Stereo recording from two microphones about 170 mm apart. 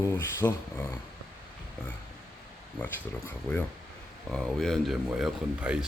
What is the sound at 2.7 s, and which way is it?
Speech, 10° left (ahead or behind).